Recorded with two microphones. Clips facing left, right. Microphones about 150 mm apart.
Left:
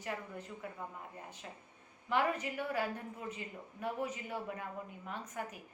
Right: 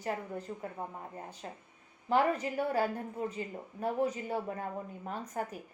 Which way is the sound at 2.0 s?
35° right (ahead or behind).